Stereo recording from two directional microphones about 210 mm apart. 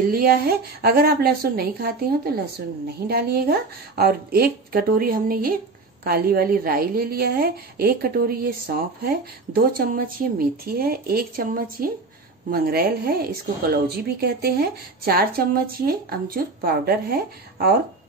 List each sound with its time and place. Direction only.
0.1 s a woman's voice: 45° right (ahead or behind)